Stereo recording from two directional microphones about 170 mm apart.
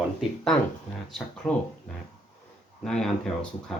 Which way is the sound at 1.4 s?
Centre (ahead or behind).